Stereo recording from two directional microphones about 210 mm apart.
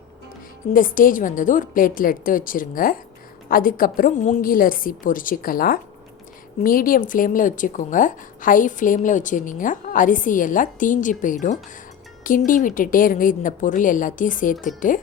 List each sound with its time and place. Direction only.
0.7 s speech: 40° left (ahead or behind)